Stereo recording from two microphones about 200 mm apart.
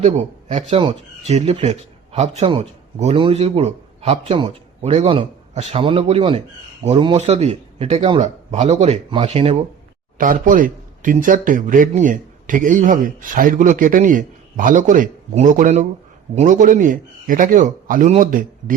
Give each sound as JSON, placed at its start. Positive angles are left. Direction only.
{"t": 0.0, "sound": "speech", "side_deg": -35}
{"t": 10.2, "sound": "speech", "side_deg": -40}